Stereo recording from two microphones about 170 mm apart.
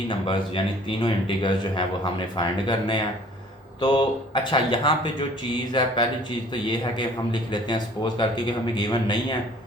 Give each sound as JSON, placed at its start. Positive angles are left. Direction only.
{"t": 0.1, "sound": "speech", "side_deg": 30}